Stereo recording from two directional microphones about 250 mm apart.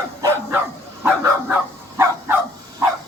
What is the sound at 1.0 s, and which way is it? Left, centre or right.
Bow-wow, centre.